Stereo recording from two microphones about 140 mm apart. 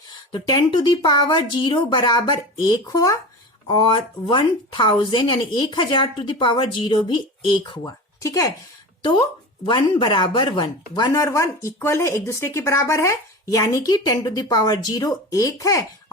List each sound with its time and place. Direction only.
0.3 s speech: 30° left (ahead or behind)
9.6 s speech: 35° left (ahead or behind)